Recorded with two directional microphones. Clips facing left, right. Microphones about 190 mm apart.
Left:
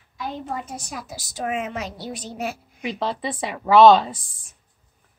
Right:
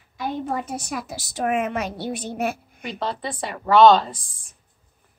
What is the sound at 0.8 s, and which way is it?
A woman's voice, 60° right (ahead or behind).